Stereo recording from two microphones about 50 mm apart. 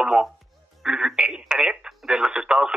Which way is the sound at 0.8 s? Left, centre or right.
Centre.